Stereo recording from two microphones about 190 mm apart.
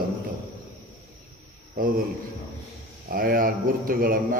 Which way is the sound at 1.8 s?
50° right (ahead or behind).